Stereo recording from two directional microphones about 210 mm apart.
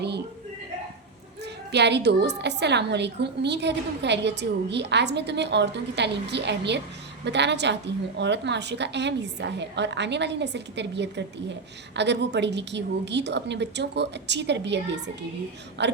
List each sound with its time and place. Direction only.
1.7 s a woman's voice: 55° right (ahead or behind)